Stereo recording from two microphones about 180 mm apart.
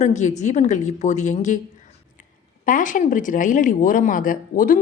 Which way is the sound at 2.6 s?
45° left (ahead or behind).